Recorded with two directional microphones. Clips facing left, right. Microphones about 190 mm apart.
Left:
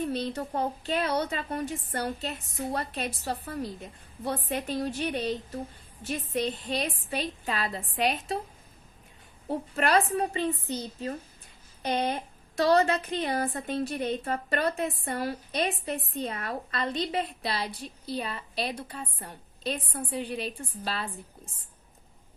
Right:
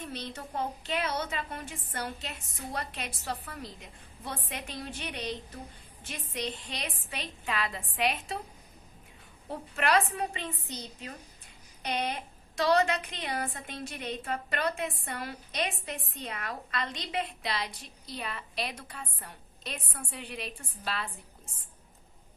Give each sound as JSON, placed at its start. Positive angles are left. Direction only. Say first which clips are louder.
{"t": 0.0, "sound": "a woman's voice", "louder": "left 9 dB", "side_deg": 35}
{"t": 9.5, "sound": "a woman's voice", "louder": "left 3 dB", "side_deg": 35}
{"t": 11.9, "sound": "a woman's voice", "louder": "left 5 dB", "side_deg": 35}